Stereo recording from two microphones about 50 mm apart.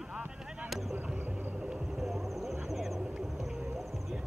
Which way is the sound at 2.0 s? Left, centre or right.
Centre.